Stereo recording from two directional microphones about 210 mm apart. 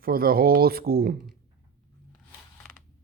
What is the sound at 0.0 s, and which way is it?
Speech, 45° right (ahead or behind).